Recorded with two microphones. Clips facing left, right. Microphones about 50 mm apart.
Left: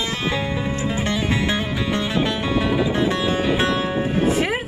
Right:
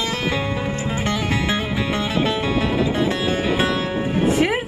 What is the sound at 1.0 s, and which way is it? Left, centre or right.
Music, centre.